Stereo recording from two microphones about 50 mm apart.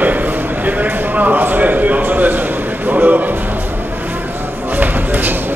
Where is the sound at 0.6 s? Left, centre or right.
Right.